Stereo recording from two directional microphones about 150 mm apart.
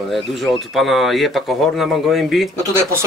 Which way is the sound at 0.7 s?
Centre (ahead or behind).